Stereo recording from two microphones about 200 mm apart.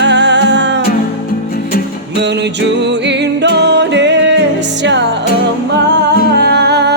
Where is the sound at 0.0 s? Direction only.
60° right (ahead or behind).